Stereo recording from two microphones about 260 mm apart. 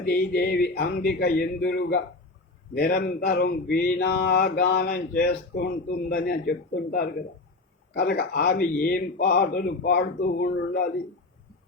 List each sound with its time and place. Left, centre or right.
0.0 s speech: left